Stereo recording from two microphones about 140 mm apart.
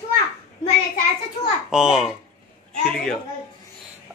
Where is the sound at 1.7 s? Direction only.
5° right (ahead or behind).